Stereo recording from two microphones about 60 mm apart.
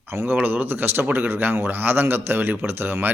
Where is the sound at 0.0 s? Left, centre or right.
Right.